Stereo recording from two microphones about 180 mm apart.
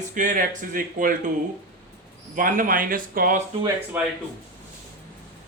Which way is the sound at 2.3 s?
50° right (ahead or behind).